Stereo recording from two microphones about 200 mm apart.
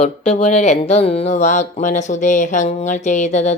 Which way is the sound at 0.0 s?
30° left (ahead or behind).